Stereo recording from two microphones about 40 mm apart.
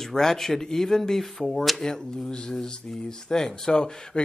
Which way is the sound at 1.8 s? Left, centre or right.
Centre.